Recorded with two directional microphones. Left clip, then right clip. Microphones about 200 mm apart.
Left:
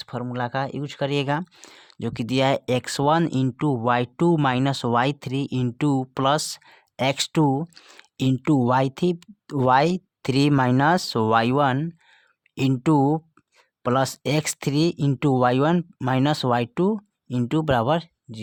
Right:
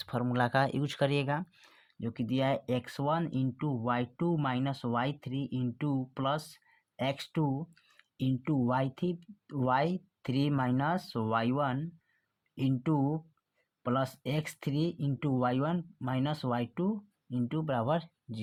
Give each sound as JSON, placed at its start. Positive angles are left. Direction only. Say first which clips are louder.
{"t": 0.0, "sound": "speech", "louder": "left 3 dB", "side_deg": 15}
{"t": 1.1, "sound": "speech", "louder": "left 8 dB", "side_deg": 30}